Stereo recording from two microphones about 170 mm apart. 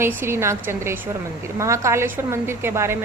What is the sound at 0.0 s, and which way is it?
A woman's voice, 15° right (ahead or behind).